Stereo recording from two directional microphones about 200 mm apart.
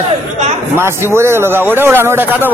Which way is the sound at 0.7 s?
10° right (ahead or behind).